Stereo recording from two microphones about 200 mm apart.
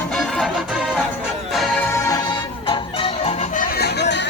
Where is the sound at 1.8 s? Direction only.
15° left (ahead or behind); by 3.6 s 35° left (ahead or behind).